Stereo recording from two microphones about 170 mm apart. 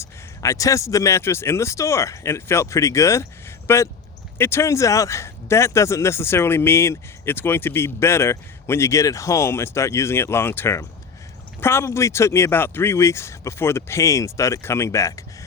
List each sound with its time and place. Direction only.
0.0 s speech: 20° left (ahead or behind)